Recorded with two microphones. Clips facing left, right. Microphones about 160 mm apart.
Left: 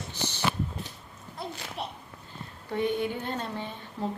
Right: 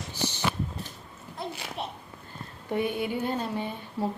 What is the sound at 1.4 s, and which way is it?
A woman's voice, centre (ahead or behind).